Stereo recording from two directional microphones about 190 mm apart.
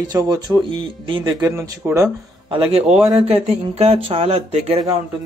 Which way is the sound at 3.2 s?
35° right (ahead or behind).